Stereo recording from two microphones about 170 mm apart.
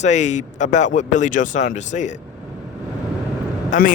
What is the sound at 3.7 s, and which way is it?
Speech, 45° left (ahead or behind).